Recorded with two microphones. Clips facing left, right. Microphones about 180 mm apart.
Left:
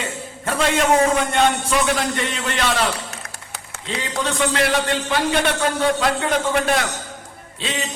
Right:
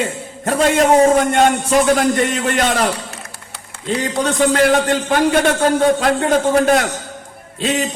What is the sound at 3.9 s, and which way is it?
A man's voice, 40° right (ahead or behind).